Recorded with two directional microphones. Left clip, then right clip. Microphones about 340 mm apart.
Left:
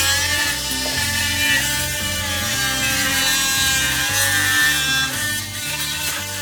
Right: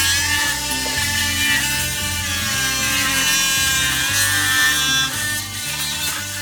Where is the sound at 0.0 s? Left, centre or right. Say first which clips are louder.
Right 1 dB; centre.